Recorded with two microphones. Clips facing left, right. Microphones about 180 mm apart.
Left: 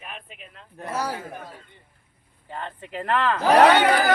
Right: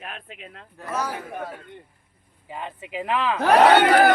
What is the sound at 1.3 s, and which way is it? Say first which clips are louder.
Speech: right 6 dB; 60° right (ahead or behind).